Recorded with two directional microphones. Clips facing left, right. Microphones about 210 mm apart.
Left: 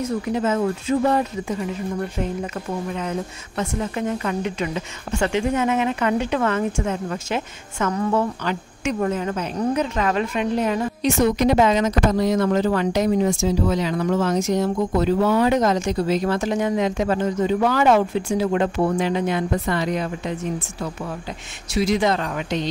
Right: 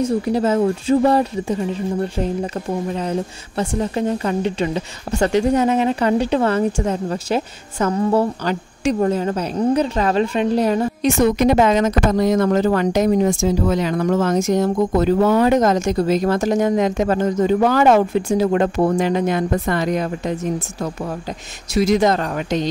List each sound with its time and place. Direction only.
0.2 s speech: 35° right (ahead or behind)
21.7 s speech: 45° right (ahead or behind)